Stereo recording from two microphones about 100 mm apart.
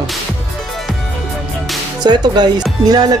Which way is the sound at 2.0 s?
45° right (ahead or behind).